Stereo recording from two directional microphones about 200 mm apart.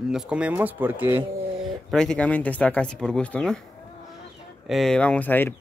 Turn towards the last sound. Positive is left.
turn(degrees=10)  # may be behind; listen again after turning